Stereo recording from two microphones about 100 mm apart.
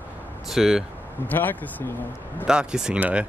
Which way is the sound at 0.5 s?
5° right (ahead or behind).